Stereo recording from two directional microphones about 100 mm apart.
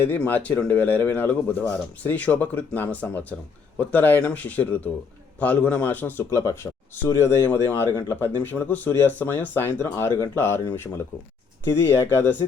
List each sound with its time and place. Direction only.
0.0 s speech: 15° left (ahead or behind)
11.6 s speech: 25° left (ahead or behind)